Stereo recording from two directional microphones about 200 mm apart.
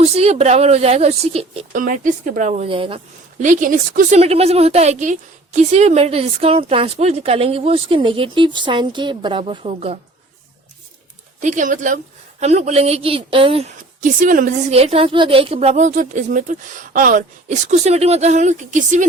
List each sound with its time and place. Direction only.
0.0 s a woman's voice: 30° right (ahead or behind)
1.8 s a woman's voice: 45° right (ahead or behind); by 3.0 s 25° right (ahead or behind)
3.3 s a woman's voice: 40° right (ahead or behind)
11.3 s a woman's voice: 40° right (ahead or behind)
14.0 s a woman's voice: 40° right (ahead or behind)